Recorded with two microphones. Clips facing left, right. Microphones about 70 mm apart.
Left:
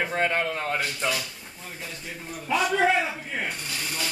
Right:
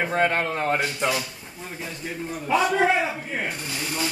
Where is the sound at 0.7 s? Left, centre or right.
Centre.